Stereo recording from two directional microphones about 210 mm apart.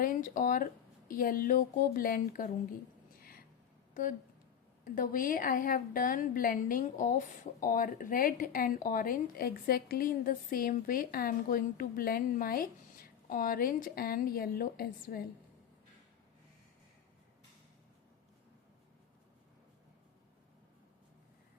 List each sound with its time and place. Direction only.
0.0 s a woman's voice: 40° left (ahead or behind)
3.2 s a sound: 45° left (ahead or behind)
4.9 s a woman's voice: 40° left (ahead or behind)